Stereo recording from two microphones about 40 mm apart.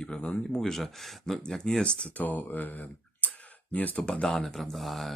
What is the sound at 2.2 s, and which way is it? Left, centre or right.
Speech, left.